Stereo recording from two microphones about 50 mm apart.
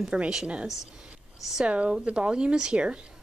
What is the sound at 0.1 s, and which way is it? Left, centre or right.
Speech, centre.